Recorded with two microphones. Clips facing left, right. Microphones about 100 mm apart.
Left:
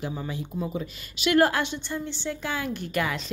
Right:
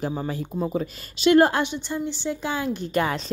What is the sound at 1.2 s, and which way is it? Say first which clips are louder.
A woman's voice: right 4 dB; 25° right (ahead or behind).